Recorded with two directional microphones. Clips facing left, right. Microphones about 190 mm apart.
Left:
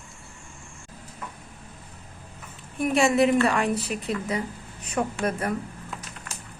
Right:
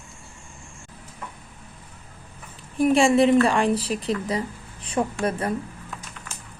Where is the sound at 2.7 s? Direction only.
30° right (ahead or behind).